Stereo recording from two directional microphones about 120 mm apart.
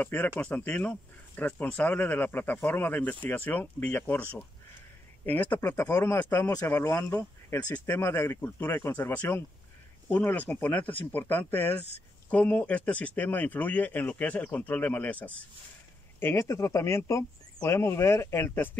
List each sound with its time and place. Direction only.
0.0 s speech: 15° left (ahead or behind)